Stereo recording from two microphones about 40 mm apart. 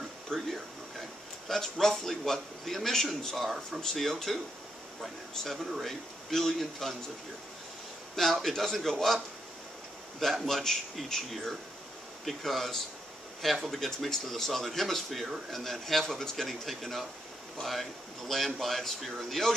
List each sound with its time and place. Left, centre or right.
0.3 s a man's voice: centre
1.5 s a man's voice: centre
3.4 s a man's voice: centre
5.7 s speech: centre
8.2 s a man's voice: centre
10.2 s a man's voice: centre